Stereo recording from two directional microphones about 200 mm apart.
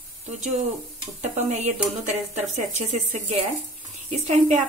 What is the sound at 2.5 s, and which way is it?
Speech, 35° right (ahead or behind).